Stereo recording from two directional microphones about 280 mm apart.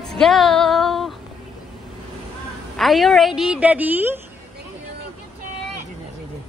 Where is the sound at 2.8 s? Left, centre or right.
Centre.